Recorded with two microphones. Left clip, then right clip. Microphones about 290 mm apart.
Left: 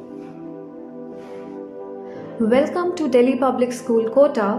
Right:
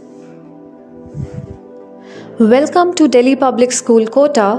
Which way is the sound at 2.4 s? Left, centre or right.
Right.